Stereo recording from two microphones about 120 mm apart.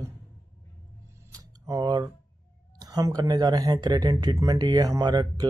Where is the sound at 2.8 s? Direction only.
30° right (ahead or behind).